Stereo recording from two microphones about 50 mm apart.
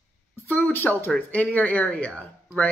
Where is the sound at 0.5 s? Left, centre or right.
Left.